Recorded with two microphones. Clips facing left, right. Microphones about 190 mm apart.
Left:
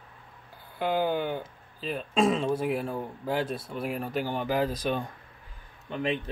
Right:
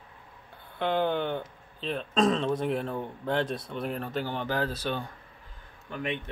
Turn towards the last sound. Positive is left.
turn(degrees=25)  # may be behind; listen again after turning